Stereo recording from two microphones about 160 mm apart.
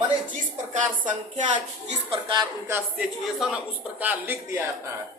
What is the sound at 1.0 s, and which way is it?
Speech, 50° right (ahead or behind).